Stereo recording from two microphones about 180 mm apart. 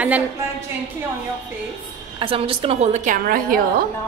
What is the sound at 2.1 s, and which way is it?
A woman's voice, 30° right (ahead or behind).